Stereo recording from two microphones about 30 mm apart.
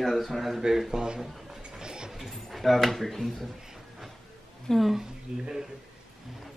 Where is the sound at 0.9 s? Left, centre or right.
Right.